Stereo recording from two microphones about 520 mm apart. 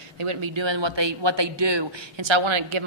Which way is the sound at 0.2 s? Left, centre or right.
Right.